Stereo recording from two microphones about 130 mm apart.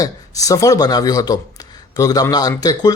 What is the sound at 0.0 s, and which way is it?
A man's voice, 25° left (ahead or behind).